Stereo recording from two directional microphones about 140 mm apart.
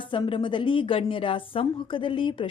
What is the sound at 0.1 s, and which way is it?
A woman's voice, 35° left (ahead or behind).